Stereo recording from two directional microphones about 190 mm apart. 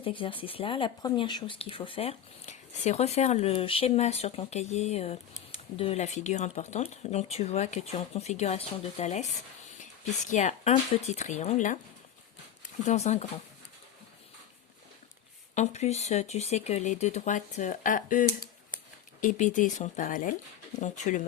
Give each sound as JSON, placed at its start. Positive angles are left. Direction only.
{"t": 0.0, "sound": "speech", "side_deg": 25}
{"t": 10.2, "sound": "speech", "side_deg": 40}
{"t": 12.8, "sound": "speech", "side_deg": 35}
{"t": 15.5, "sound": "speech", "side_deg": 35}